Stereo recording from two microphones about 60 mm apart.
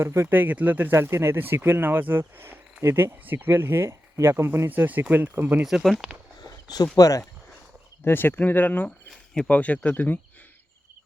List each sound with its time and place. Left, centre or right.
0.0 s speech: right
0.3 s speech: right
4.7 s speech: right
5.8 s speech: centre
6.9 s speech: left
8.0 s speech: left